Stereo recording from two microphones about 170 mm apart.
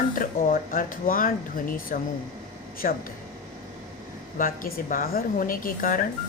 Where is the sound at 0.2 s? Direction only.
55° left (ahead or behind).